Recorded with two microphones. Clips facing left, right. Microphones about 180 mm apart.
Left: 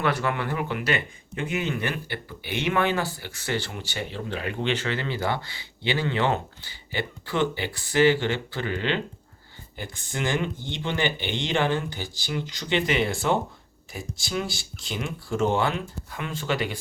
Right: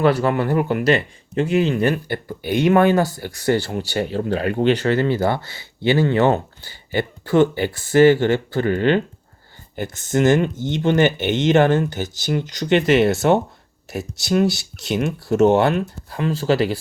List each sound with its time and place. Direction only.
0.0 s speech: 35° right (ahead or behind); by 15.8 s 65° right (ahead or behind)
16.0 s speech: 35° right (ahead or behind)